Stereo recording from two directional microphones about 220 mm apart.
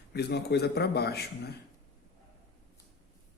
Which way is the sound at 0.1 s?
50° left (ahead or behind).